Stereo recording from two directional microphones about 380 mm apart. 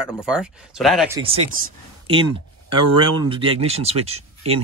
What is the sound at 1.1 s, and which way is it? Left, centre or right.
Speech, centre.